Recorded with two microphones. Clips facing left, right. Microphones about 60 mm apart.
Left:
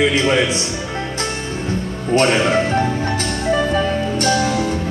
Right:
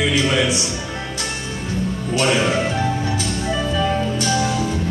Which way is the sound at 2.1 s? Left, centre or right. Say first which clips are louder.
Left 4 dB; left.